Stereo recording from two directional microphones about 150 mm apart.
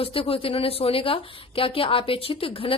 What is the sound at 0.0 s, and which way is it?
A woman's voice, 40° left (ahead or behind).